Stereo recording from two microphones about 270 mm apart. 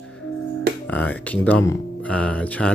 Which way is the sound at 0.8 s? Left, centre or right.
Centre.